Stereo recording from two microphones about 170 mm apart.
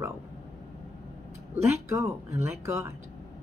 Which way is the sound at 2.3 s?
15° right (ahead or behind).